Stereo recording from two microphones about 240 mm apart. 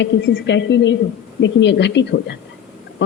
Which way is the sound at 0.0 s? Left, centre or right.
Left.